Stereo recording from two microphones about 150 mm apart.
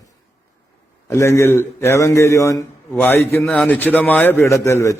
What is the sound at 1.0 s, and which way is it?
A man's voice, 20° left (ahead or behind).